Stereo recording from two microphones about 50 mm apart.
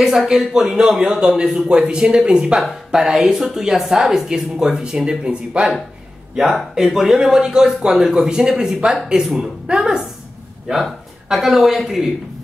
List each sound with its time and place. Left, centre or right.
0.0 s a woman's voice: centre
6.7 s a woman's voice: centre
9.2 s speech: centre
9.7 s a woman's voice: centre
10.7 s speech: centre